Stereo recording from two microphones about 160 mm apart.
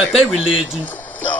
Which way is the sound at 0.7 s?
10° left (ahead or behind).